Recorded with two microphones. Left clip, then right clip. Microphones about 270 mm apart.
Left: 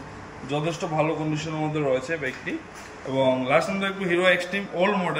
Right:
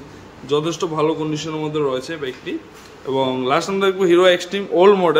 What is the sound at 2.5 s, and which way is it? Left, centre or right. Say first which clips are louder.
A man's voice: right 4 dB; centre.